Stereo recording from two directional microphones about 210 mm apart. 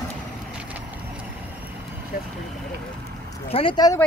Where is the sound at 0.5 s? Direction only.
5° right (ahead or behind).